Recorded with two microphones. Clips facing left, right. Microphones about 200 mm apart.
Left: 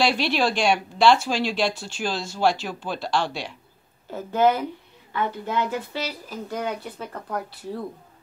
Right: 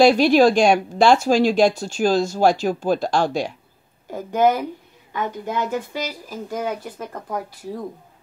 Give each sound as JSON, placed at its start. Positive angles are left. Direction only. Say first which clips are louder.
{"t": 0.0, "sound": "speech", "louder": "right 9 dB", "side_deg": -45}
{"t": 4.1, "sound": "speech", "louder": "right 2 dB", "side_deg": -15}